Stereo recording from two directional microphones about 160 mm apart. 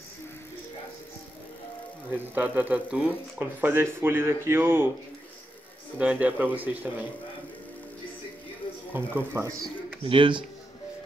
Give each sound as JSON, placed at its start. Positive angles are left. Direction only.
{"t": 2.1, "sound": "speech", "side_deg": -10}
{"t": 5.9, "sound": "speech", "side_deg": -10}
{"t": 8.9, "sound": "speech", "side_deg": -15}
{"t": 10.0, "sound": "speech", "side_deg": -35}